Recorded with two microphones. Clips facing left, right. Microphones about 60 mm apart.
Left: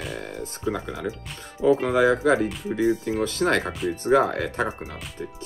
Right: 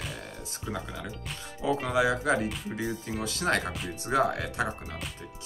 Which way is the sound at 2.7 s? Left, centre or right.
Left.